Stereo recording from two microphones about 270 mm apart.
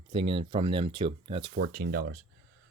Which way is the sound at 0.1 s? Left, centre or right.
Centre.